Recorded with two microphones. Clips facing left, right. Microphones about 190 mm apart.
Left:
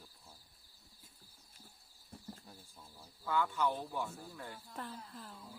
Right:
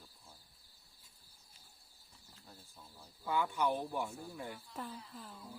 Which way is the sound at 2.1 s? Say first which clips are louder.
Left 14 dB; 55° left (ahead or behind).